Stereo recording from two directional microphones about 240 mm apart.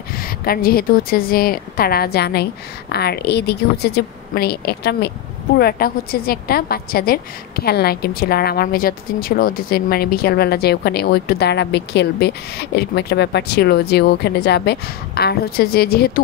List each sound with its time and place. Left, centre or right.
0.1 s a woman's voice: left